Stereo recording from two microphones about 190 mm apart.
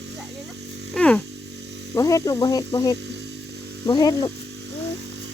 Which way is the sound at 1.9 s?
20° left (ahead or behind).